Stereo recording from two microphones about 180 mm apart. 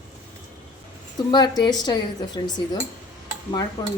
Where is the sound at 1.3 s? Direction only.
25° left (ahead or behind).